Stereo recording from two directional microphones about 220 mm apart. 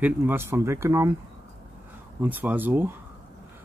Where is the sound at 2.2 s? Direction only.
10° right (ahead or behind).